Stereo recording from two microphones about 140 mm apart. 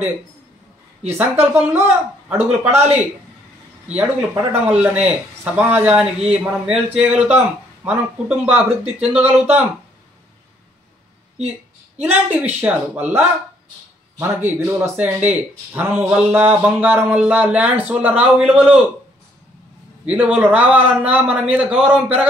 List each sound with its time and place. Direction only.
1.0 s a man's voice: 15° right (ahead or behind)
12.0 s a man's voice: 10° right (ahead or behind)
20.1 s a man's voice: 10° right (ahead or behind)